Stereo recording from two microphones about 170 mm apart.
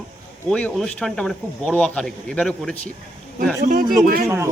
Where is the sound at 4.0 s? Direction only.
55° right (ahead or behind).